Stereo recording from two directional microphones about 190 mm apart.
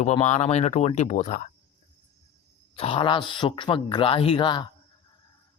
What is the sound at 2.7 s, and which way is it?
Speech, 30° left (ahead or behind).